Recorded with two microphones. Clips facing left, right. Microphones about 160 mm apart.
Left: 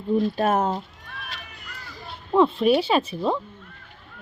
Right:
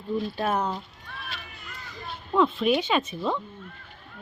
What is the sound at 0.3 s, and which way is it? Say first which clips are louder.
Speech: left 5 dB; 45° left (ahead or behind).